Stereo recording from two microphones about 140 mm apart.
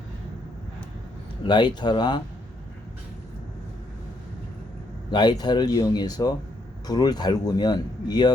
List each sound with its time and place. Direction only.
1.5 s speech: 30° left (ahead or behind)
5.1 s speech: 30° left (ahead or behind)